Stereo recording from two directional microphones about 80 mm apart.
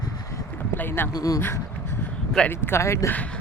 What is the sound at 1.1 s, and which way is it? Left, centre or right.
Speech, left.